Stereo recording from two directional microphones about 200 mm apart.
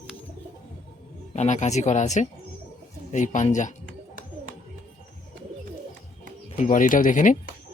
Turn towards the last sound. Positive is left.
turn(degrees=40)  # may be behind; listen again after turning